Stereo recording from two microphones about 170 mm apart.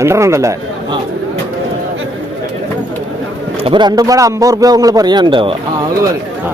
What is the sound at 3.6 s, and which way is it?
A man's voice, 30° right (ahead or behind).